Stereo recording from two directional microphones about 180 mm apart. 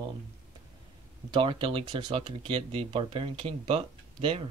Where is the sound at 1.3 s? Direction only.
30° right (ahead or behind).